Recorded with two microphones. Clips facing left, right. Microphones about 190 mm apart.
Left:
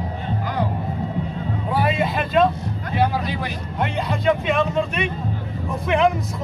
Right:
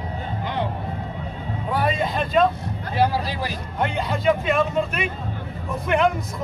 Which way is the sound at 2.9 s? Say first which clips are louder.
Even; 35° right (ahead or behind).